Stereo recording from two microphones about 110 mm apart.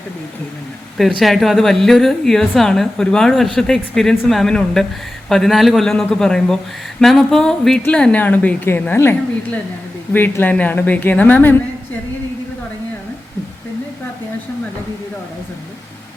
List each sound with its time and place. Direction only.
1.2 s a woman's voice: centre (ahead or behind); by 11.5 s 15° left (ahead or behind)